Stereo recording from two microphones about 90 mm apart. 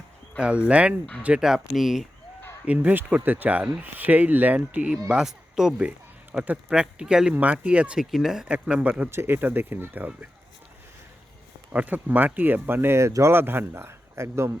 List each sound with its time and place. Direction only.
0.3 s speech: 10° right (ahead or behind)
2.6 s speech: 20° right (ahead or behind)
9.0 s speech: 25° right (ahead or behind)
11.7 s speech: 15° right (ahead or behind)